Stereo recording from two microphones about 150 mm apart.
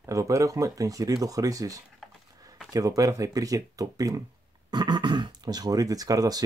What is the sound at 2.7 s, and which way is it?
Speech, 25° right (ahead or behind).